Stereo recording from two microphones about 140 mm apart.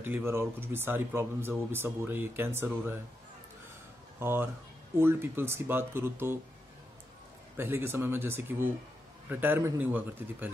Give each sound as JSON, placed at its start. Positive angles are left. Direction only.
{"t": 0.0, "sound": "speech", "side_deg": -15}
{"t": 4.2, "sound": "speech", "side_deg": -15}
{"t": 7.5, "sound": "speech", "side_deg": -15}